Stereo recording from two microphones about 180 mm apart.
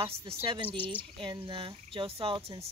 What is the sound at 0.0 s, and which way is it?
Speech, 30° right (ahead or behind).